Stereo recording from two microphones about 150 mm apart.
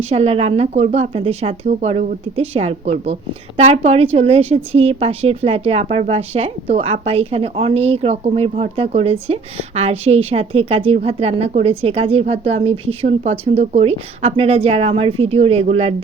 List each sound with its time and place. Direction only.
0.1 s a woman's voice: 45° right (ahead or behind)